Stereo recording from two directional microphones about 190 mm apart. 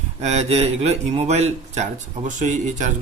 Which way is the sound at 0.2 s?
35° right (ahead or behind).